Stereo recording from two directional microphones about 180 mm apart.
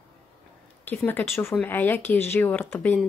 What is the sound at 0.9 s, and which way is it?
Speech, 10° left (ahead or behind).